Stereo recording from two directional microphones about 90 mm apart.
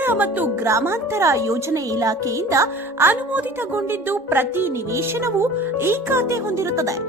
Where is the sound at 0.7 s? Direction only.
30° right (ahead or behind).